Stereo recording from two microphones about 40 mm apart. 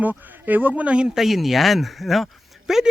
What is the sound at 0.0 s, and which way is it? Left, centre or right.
Speech, right.